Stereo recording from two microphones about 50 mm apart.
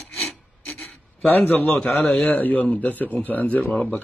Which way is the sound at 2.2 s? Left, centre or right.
Left.